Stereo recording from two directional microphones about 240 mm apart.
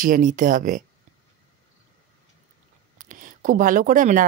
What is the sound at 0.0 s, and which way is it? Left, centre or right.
Speech, right.